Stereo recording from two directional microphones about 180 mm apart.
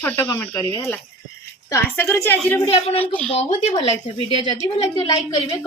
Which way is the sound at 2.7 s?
30° left (ahead or behind).